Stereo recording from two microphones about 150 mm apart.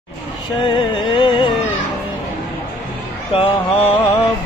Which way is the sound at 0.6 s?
35° left (ahead or behind).